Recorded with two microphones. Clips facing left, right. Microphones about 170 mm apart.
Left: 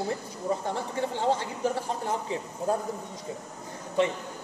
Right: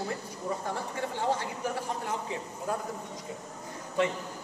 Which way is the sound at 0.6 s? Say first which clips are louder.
Left 4 dB; 25° left (ahead or behind).